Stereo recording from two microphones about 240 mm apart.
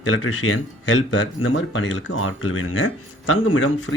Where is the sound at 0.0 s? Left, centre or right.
Left.